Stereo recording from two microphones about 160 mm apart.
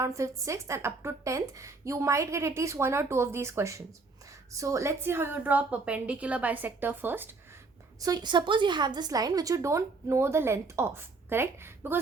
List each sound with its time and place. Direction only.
0.0 s a woman's voice: 20° right (ahead or behind)
8.0 s a woman's voice: 25° right (ahead or behind)